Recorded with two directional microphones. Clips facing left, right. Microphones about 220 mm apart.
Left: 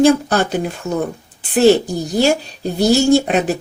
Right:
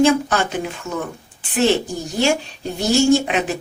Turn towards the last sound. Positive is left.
turn(degrees=40)  # may be behind; listen again after turning